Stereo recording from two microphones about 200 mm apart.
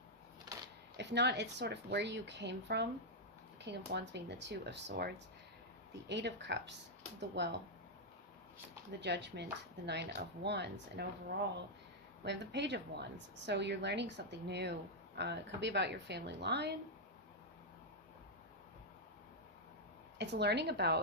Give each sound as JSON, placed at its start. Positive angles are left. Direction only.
{"t": 0.5, "sound": "a sound", "side_deg": -20}
{"t": 0.9, "sound": "speech", "side_deg": -60}
{"t": 9.0, "sound": "speech", "side_deg": -60}
{"t": 12.2, "sound": "speech", "side_deg": -60}
{"t": 20.1, "sound": "speech", "side_deg": -55}